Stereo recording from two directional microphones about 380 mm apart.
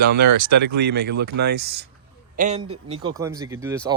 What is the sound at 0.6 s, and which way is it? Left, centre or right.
Speech, right.